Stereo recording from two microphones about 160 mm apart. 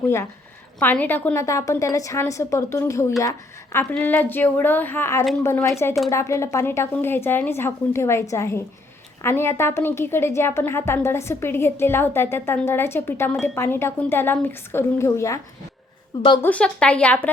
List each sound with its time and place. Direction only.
0.8 s a woman's voice: 10° left (ahead or behind)
16.4 s a woman's voice: 10° left (ahead or behind)